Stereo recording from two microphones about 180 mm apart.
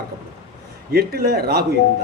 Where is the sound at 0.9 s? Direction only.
60° right (ahead or behind).